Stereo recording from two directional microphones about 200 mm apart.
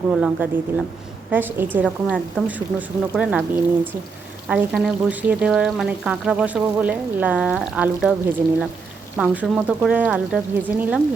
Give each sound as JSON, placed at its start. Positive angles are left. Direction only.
{"t": 0.1, "sound": "speech", "side_deg": -5}